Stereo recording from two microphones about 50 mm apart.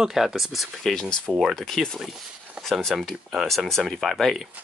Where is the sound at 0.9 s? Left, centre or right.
Centre.